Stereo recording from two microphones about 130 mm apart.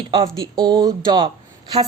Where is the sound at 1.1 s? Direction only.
35° right (ahead or behind).